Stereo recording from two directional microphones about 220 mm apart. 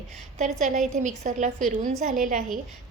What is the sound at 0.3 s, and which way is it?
A woman's voice, 35° right (ahead or behind).